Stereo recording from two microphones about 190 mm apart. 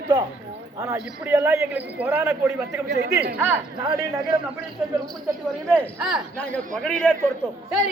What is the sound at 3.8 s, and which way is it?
Speech, 20° right (ahead or behind).